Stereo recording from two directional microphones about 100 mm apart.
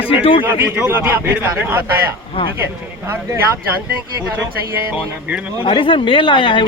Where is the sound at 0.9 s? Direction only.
20° right (ahead or behind).